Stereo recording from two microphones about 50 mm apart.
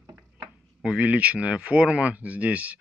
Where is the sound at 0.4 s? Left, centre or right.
Right.